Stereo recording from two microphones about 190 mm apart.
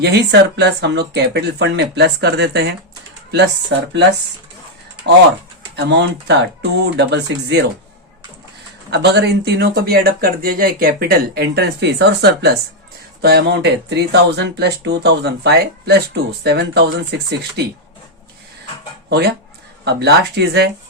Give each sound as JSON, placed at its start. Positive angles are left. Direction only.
{"t": 0.0, "sound": "speech", "side_deg": -60}
{"t": 5.7, "sound": "speech", "side_deg": -65}
{"t": 8.9, "sound": "speech", "side_deg": -60}
{"t": 19.0, "sound": "speech", "side_deg": -60}